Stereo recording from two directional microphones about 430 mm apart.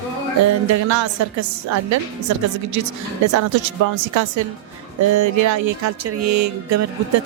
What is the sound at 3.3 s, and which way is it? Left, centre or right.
A woman's voice, right.